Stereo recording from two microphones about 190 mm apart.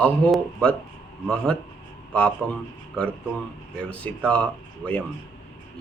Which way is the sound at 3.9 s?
5° left (ahead or behind).